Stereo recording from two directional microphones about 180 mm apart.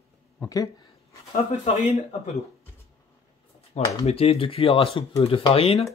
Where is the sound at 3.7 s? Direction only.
35° left (ahead or behind).